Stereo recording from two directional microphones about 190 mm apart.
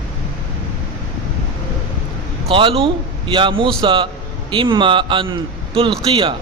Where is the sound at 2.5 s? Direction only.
30° right (ahead or behind).